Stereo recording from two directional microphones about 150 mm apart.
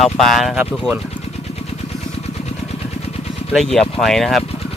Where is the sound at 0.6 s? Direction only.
10° right (ahead or behind).